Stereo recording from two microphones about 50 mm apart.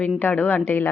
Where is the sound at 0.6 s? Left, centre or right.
Left.